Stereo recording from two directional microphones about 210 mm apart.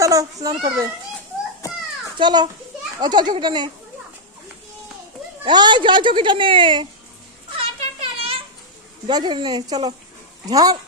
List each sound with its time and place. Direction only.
0.0 s a child's voice: 15° right (ahead or behind)
2.1 s speech: 20° right (ahead or behind)
5.4 s speech: 20° right (ahead or behind)
7.5 s a sound: 25° right (ahead or behind)
9.0 s speech: 20° right (ahead or behind)